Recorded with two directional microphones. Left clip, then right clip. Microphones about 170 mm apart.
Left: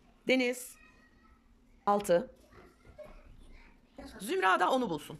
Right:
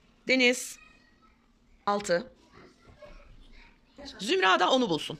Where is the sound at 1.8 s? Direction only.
15° left (ahead or behind).